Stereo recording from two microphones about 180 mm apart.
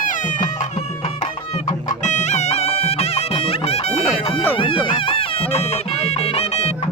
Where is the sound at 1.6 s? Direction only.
40° left (ahead or behind).